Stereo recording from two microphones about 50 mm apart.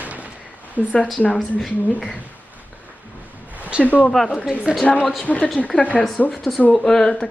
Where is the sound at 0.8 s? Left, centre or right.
Right.